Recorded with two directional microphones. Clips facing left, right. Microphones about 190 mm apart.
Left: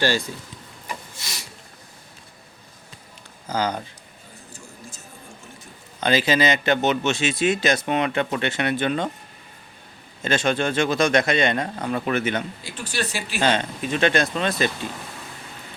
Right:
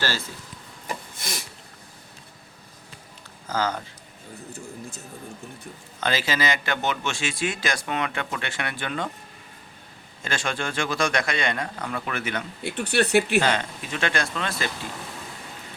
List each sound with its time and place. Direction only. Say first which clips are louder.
0.0 s speech: left 7 dB; 15° left (ahead or behind)
1.1 s a sound: right 4 dB; 50° right (ahead or behind)
3.5 s speech: left 2 dB; 15° left (ahead or behind)
6.0 s a man's voice: left 6 dB; 20° left (ahead or behind)
10.2 s a man's voice: left 7 dB; 20° left (ahead or behind)
12.6 s speech: right 5 dB; 65° right (ahead or behind)
13.4 s a man's voice: left 3 dB; 25° left (ahead or behind)